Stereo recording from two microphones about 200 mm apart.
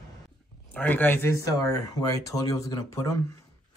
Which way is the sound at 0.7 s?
10° left (ahead or behind).